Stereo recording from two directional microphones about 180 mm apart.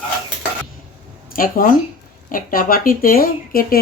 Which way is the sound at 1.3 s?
50° left (ahead or behind).